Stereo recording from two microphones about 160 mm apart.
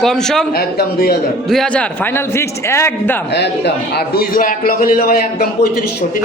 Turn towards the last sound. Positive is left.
turn(degrees=65)  # may be behind; listen again after turning